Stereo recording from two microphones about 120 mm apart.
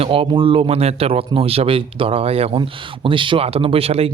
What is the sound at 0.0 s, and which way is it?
Speech, 50° right (ahead or behind).